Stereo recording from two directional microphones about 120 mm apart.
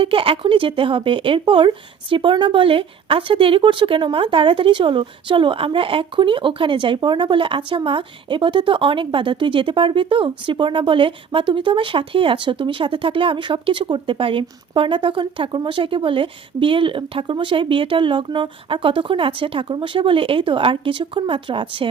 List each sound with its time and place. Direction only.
0.0 s speech: 45° right (ahead or behind)